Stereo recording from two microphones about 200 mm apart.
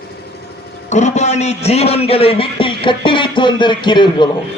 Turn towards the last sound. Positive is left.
turn(degrees=20)  # may be behind; listen again after turning